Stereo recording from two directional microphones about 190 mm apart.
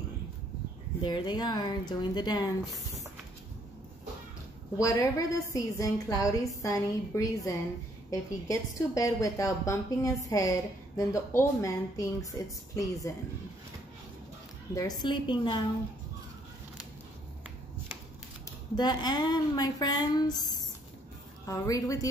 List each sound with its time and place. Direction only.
1.0 s speech: 25° left (ahead or behind)
4.8 s a woman's voice: 15° left (ahead or behind)
14.7 s speech: 20° left (ahead or behind)
18.8 s speech: 20° left (ahead or behind)
21.5 s a woman's voice: 15° left (ahead or behind)